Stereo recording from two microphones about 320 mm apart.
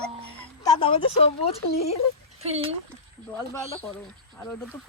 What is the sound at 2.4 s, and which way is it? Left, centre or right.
Speech, centre.